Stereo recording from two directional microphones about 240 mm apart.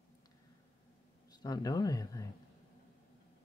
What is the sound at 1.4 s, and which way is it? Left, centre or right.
Speech, centre.